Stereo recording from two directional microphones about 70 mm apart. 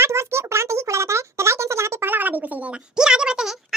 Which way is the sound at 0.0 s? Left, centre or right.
Right.